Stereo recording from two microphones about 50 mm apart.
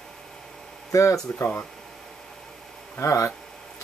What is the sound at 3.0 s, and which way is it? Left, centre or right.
Speech, left.